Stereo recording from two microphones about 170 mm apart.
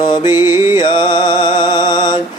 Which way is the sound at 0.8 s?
30° left (ahead or behind).